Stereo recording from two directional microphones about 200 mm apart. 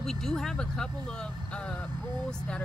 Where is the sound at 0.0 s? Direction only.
Centre (ahead or behind).